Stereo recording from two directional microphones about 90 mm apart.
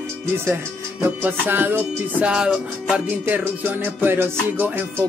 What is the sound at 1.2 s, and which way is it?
Music, 20° right (ahead or behind).